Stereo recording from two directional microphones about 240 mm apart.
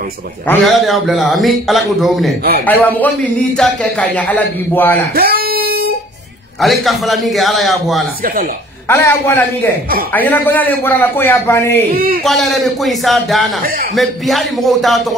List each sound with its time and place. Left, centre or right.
0.5 s a man's voice: centre
5.1 s guitar: right
6.6 s a man's voice: centre
8.8 s a man's voice: centre
13.6 s a man's voice: right
13.9 s a man's voice: centre